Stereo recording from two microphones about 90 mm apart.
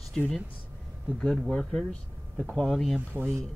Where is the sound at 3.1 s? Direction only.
20° right (ahead or behind).